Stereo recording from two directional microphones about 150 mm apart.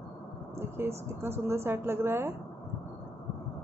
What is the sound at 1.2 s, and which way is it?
Speech, 15° right (ahead or behind).